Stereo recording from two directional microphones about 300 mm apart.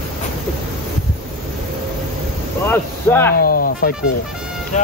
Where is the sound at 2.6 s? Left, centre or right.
Centre.